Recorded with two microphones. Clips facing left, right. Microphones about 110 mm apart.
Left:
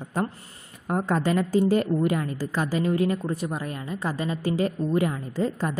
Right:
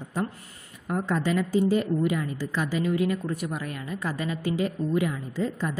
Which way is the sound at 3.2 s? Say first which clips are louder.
Left 2 dB; 25° left (ahead or behind).